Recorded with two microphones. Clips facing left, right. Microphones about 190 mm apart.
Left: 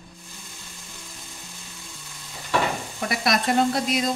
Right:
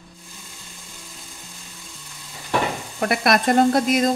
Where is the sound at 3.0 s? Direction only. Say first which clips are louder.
Right 5 dB; 55° right (ahead or behind).